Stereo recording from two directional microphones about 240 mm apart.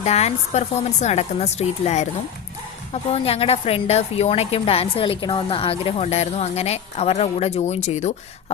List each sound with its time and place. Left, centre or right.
0.0 s a woman's voice: left